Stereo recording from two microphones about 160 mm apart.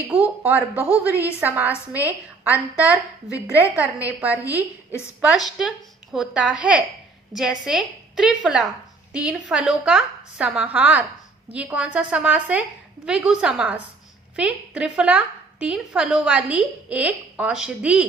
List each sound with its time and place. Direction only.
0.1 s a woman's voice: 10° right (ahead or behind)
4.9 s a woman's voice: 15° left (ahead or behind)
5.3 s a woman's voice: centre (ahead or behind)